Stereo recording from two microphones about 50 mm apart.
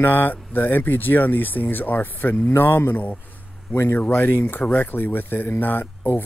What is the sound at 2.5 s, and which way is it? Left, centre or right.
Speech, left.